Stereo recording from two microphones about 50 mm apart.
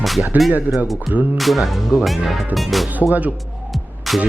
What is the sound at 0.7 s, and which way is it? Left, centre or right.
Speech, centre.